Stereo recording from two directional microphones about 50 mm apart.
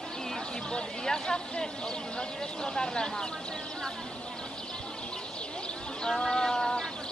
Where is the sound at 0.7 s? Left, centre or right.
Centre.